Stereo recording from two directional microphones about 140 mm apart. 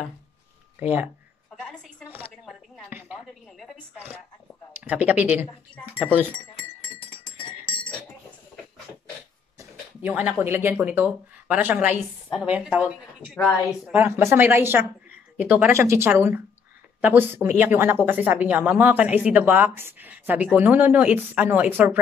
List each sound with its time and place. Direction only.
0.7 s speech: 15° right (ahead or behind)
1.6 s dishes: 5° left (ahead or behind)
2.9 s a sound: 15° right (ahead or behind)
4.8 s speech: 10° right (ahead or behind)
7.7 s chink: 35° left (ahead or behind)
10.0 s speech: 15° right (ahead or behind)